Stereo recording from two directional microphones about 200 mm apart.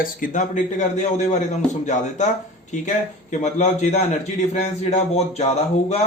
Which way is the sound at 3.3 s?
35° left (ahead or behind).